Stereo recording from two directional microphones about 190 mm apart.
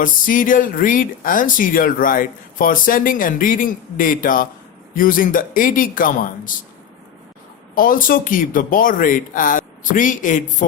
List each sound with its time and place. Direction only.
0.0 s speech: 45° left (ahead or behind)
7.8 s speech: 45° left (ahead or behind)